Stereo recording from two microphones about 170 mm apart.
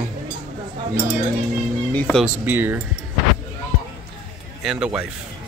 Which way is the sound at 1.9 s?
5° left (ahead or behind).